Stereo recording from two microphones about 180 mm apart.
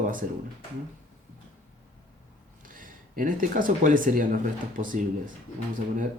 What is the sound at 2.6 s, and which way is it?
Speech, 50° right (ahead or behind).